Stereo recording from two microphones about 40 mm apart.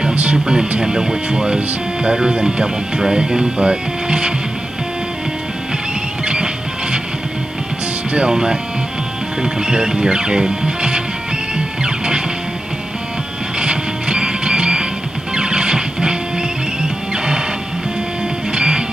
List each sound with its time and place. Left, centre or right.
0.1 s music: right
0.7 s speech: centre
6.2 s music: right
8.3 s speech: centre
11.5 s music: right
13.6 s music: right
18.5 s music: right